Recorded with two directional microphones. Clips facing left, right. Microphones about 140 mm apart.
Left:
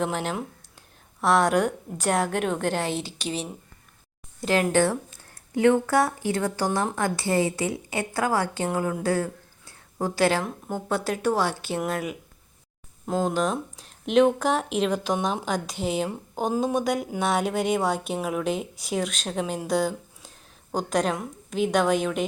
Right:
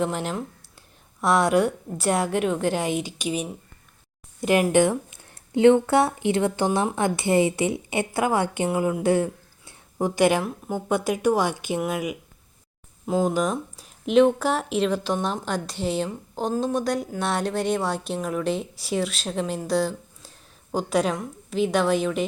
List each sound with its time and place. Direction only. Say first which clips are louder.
0.0 s a woman's voice: right 1 dB; centre (ahead or behind)
9.0 s a sound: right 4 dB; 20° right (ahead or behind)
10.4 s a woman's voice: right 2 dB; 10° right (ahead or behind)